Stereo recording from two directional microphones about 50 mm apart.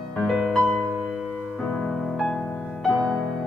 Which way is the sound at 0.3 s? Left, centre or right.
Centre.